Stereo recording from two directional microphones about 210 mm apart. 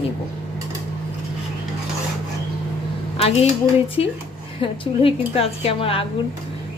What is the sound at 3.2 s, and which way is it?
Speech, 30° left (ahead or behind).